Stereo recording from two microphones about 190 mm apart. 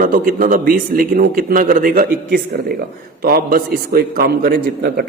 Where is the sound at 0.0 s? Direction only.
45° right (ahead or behind).